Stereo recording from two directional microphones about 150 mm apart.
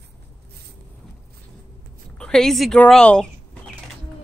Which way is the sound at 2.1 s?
5° left (ahead or behind).